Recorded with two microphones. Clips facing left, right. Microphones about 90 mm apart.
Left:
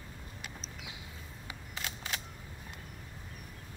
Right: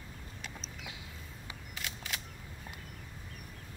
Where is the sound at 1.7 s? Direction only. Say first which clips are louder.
Left 2 dB; 30° left (ahead or behind).